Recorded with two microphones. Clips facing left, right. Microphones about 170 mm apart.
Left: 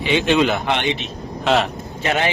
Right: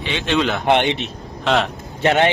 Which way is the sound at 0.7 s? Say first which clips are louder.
Right 4 dB; 60° right (ahead or behind).